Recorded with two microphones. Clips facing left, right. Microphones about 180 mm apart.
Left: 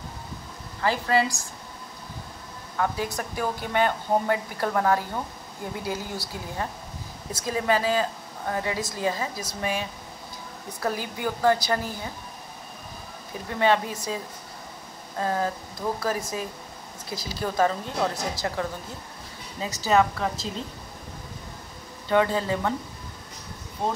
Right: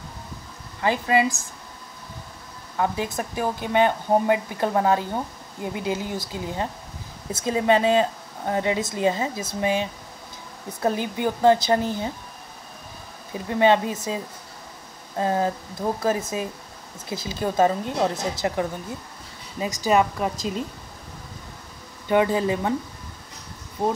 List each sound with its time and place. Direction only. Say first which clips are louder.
0.8 s speech: right 2 dB; 20° right (ahead or behind)
2.8 s speech: right 2 dB; 20° right (ahead or behind)
13.5 s speech: right 4 dB; 20° right (ahead or behind)
19.6 s speech: right 1 dB; 15° right (ahead or behind)
22.1 s speech: right 2 dB; 15° right (ahead or behind)